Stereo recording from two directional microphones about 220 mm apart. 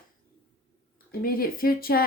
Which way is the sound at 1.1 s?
40° left (ahead or behind).